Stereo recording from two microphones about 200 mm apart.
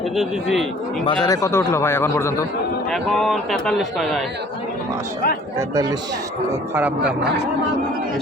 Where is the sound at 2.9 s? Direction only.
Centre (ahead or behind).